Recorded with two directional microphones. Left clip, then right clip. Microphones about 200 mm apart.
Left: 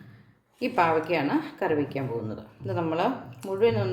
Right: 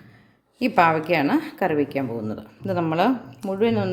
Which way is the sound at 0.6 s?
45° right (ahead or behind).